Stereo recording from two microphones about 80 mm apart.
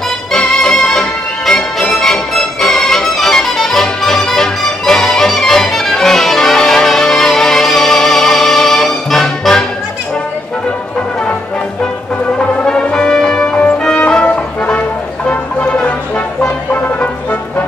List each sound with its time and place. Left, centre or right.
0.3 s music: centre
12.4 s music: centre